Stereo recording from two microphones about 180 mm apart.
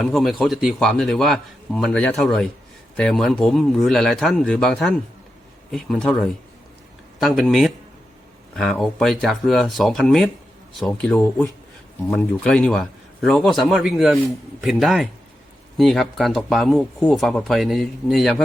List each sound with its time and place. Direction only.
0.0 s speech: centre (ahead or behind)